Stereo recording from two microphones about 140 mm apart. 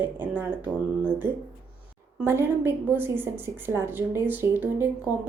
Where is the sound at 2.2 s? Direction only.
15° right (ahead or behind).